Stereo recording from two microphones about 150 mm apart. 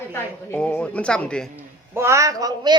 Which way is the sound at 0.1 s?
15° left (ahead or behind).